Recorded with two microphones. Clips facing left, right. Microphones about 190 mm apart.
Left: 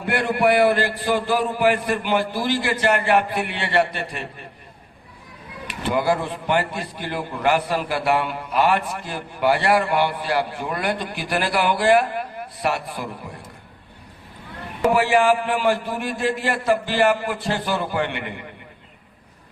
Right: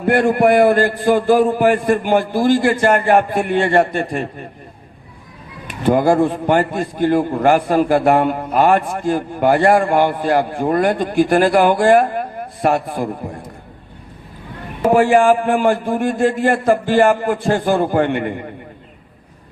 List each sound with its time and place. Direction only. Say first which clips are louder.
0.0 s a man's voice: right 7 dB; 45° right (ahead or behind)
5.6 s a man's voice: right 7 dB; 45° right (ahead or behind)
14.8 s a man's voice: right 6 dB; 50° right (ahead or behind)